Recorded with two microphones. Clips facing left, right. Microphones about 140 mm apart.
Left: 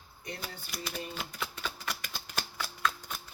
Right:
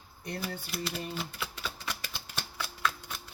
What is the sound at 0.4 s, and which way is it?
Typewriter, 5° right (ahead or behind).